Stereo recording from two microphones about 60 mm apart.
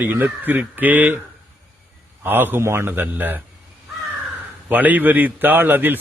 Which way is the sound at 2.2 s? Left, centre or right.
Right.